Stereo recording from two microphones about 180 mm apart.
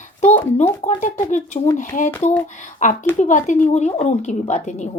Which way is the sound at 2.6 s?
45° left (ahead or behind).